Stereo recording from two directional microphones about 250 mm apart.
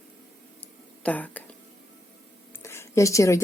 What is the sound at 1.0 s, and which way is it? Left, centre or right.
Speech, centre.